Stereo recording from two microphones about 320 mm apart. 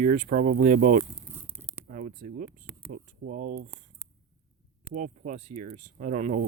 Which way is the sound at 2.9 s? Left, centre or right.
Right.